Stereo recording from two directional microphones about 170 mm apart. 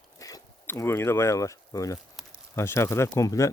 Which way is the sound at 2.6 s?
15° left (ahead or behind).